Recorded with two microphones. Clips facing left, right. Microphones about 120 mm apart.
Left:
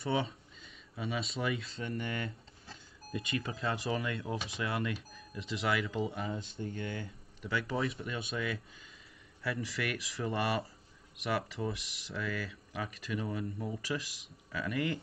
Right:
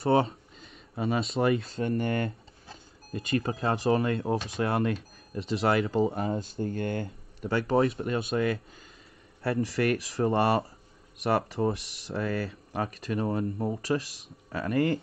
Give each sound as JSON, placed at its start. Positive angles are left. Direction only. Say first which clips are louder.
{"t": 0.0, "sound": "speech", "louder": "right 9 dB", "side_deg": -50}
{"t": 3.5, "sound": "speech", "louder": "right 7 dB", "side_deg": -30}
{"t": 3.8, "sound": "speech", "louder": "right 10 dB", "side_deg": -50}